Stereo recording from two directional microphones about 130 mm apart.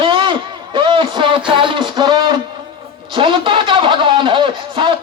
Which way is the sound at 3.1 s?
40° right (ahead or behind).